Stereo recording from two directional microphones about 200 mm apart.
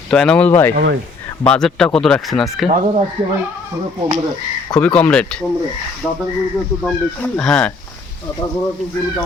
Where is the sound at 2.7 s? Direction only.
30° right (ahead or behind).